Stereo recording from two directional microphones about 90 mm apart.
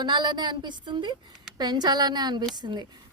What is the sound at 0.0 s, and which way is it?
A woman's voice, 55° right (ahead or behind).